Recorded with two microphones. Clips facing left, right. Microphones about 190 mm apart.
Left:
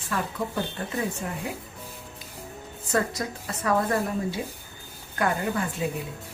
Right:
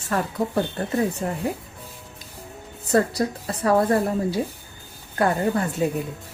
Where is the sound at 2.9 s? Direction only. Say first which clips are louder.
Right 6 dB; 35° right (ahead or behind).